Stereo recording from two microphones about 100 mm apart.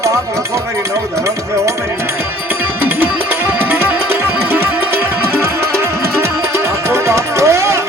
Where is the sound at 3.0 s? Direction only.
20° right (ahead or behind).